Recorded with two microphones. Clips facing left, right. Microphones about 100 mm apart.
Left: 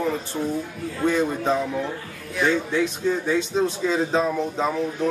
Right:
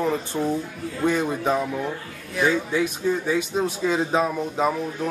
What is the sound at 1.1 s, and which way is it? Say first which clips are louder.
Speech: left 1 dB; 15° right (ahead or behind).